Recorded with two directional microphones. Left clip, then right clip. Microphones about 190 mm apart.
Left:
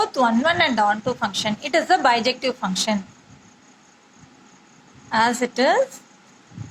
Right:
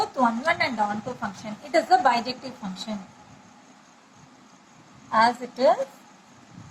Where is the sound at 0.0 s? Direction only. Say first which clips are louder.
Left 4 dB; 20° left (ahead or behind).